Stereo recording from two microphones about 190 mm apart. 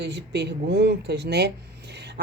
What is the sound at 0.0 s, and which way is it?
Speech, 65° right (ahead or behind).